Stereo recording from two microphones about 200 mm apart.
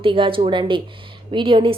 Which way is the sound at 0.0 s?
25° right (ahead or behind).